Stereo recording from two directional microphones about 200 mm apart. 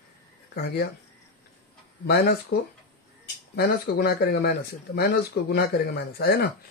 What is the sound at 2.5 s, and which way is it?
Speech, 55° left (ahead or behind).